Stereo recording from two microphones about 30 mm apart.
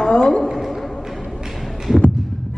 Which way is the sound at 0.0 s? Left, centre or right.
Left.